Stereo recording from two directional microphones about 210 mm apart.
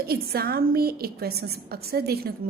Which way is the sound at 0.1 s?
45° right (ahead or behind).